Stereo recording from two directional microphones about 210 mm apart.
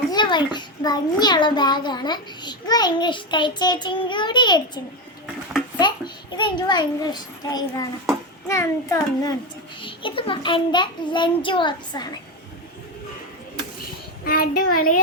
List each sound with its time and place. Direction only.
0.1 s a child's voice: 20° left (ahead or behind)
5.2 s a sound: 5° right (ahead or behind)
6.3 s a child's voice: 20° left (ahead or behind)
14.3 s a child's voice: 45° left (ahead or behind)